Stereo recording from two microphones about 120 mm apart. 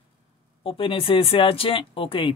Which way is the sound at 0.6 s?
50° left (ahead or behind).